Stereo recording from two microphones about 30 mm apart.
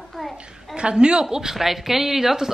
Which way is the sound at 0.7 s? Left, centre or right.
Right.